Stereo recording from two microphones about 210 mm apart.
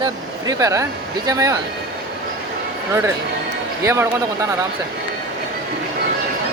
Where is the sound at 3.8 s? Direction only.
15° right (ahead or behind).